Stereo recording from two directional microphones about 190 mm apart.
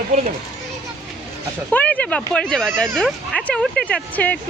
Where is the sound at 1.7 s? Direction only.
5° left (ahead or behind).